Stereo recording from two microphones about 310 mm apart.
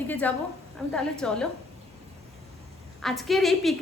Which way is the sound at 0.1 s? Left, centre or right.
Centre.